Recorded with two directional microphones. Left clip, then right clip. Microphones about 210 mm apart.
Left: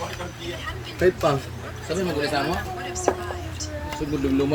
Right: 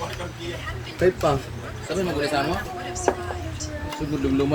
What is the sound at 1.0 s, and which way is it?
Speech, 30° left (ahead or behind).